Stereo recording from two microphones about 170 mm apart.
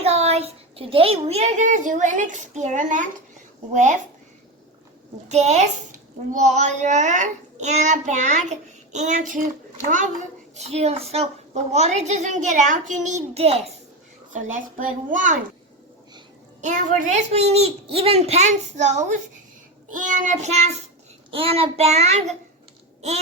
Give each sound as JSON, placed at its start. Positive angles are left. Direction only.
{"t": 0.0, "sound": "a child's voice", "side_deg": -40}
{"t": 5.3, "sound": "a child's voice", "side_deg": -40}
{"t": 14.3, "sound": "a child's voice", "side_deg": -50}
{"t": 16.6, "sound": "a child's voice", "side_deg": -45}
{"t": 23.0, "sound": "babbling", "side_deg": -40}